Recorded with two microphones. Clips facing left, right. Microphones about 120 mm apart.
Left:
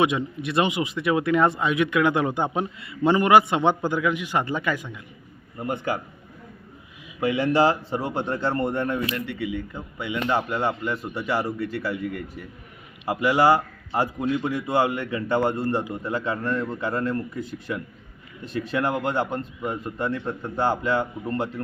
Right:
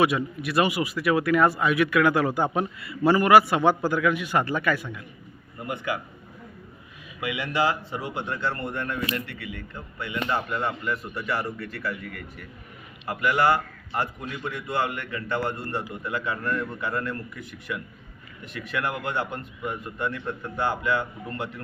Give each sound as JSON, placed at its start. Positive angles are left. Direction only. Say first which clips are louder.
{"t": 0.0, "sound": "speech", "louder": "even", "side_deg": 25}
{"t": 5.5, "sound": "speech", "louder": "left 3 dB", "side_deg": 35}
{"t": 7.2, "sound": "speech", "louder": "left 6 dB", "side_deg": 35}
{"t": 9.1, "sound": "speech", "louder": "left 5 dB", "side_deg": 0}
{"t": 10.7, "sound": "speech", "louder": "left 3 dB", "side_deg": 30}
{"t": 15.6, "sound": "a man's voice", "louder": "left 6 dB", "side_deg": 15}
{"t": 15.9, "sound": "speech", "louder": "left 3 dB", "side_deg": 30}